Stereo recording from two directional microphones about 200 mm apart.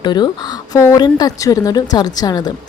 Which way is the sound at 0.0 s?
20° left (ahead or behind).